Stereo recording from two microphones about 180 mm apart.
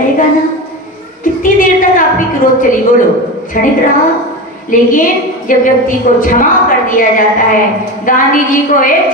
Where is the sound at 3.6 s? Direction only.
50° left (ahead or behind).